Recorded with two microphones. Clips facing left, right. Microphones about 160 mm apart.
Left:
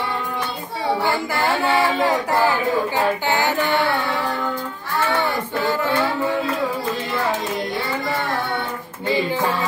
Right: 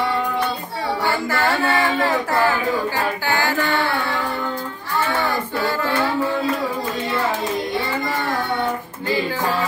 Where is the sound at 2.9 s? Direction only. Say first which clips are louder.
Left 2 dB; 20° left (ahead or behind).